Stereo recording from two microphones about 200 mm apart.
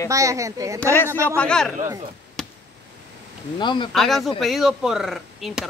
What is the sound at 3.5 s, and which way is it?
Speech, 25° left (ahead or behind).